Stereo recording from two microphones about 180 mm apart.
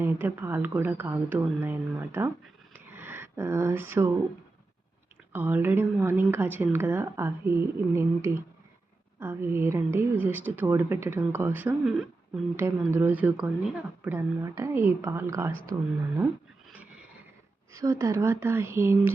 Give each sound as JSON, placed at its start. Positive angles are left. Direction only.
{"t": 0.0, "sound": "a woman's voice", "side_deg": -10}
{"t": 2.7, "sound": "a sound", "side_deg": -10}
{"t": 5.3, "sound": "a woman's voice", "side_deg": -10}
{"t": 17.7, "sound": "a woman's voice", "side_deg": -15}